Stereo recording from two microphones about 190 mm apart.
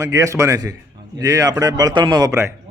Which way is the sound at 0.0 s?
15° right (ahead or behind).